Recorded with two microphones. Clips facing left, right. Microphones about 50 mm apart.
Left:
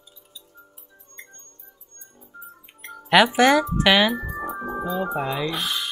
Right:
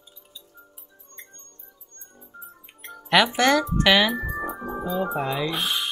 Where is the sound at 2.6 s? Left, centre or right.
Centre.